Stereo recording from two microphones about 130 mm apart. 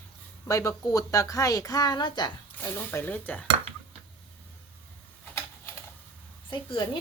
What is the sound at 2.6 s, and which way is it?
Speech, 15° left (ahead or behind).